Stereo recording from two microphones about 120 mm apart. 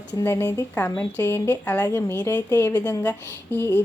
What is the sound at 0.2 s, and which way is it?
Speech, 25° left (ahead or behind).